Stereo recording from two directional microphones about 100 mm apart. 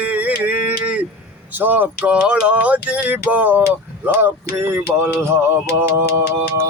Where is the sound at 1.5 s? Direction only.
20° right (ahead or behind).